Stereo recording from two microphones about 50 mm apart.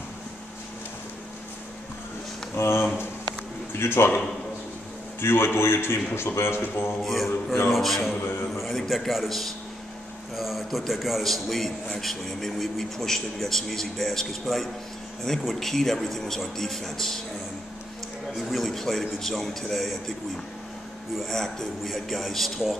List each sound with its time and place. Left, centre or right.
2.5 s a man's voice: left
5.2 s a man's voice: left
7.0 s a man's voice: centre
18.5 s speech: centre
21.2 s a man's voice: centre